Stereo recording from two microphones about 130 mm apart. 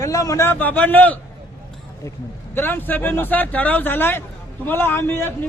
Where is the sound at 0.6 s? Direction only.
15° left (ahead or behind).